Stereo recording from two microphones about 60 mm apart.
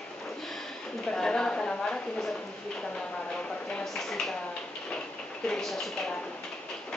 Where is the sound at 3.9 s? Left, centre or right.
Centre.